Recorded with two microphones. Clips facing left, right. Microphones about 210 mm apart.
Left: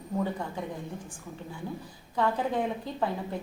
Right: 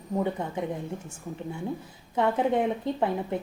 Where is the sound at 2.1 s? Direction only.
20° right (ahead or behind).